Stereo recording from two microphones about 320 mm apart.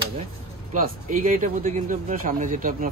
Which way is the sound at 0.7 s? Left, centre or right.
Right.